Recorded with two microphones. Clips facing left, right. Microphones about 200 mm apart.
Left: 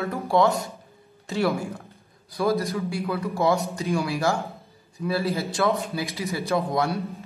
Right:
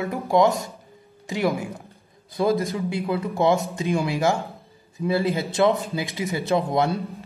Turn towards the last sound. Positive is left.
turn(degrees=-25)  # may be behind; listen again after turning